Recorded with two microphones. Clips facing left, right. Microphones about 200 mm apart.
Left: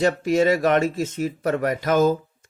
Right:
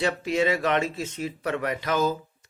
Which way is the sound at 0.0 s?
45° left (ahead or behind).